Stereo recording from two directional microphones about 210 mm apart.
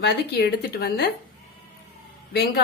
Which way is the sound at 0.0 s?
50° left (ahead or behind).